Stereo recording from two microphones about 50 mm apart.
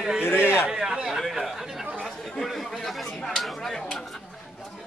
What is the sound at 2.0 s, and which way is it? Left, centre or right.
Chatter, centre.